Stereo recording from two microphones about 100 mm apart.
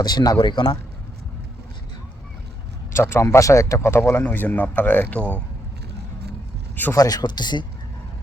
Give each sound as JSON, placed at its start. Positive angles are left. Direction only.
{"t": 0.0, "sound": "speech", "side_deg": 40}
{"t": 0.3, "sound": "speech", "side_deg": 50}
{"t": 2.9, "sound": "speech", "side_deg": 25}
{"t": 6.9, "sound": "speech", "side_deg": 40}